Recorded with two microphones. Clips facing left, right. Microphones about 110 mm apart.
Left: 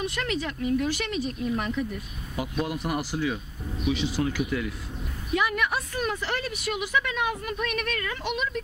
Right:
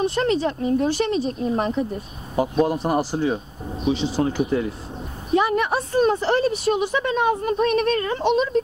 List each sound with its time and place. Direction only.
0.0 s speech: 30° right (ahead or behind)